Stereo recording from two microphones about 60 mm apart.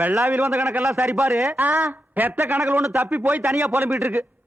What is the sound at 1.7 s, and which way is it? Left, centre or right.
Speech, right.